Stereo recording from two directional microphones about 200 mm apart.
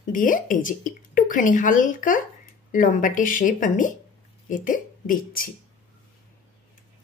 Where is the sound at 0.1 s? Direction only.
40° left (ahead or behind).